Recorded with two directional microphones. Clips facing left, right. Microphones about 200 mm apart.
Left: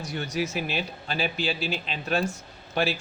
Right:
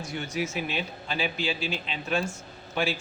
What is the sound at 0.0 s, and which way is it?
A man's voice, 35° left (ahead or behind).